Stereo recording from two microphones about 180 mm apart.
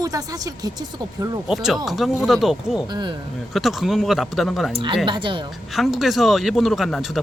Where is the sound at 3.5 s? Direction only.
Centre (ahead or behind).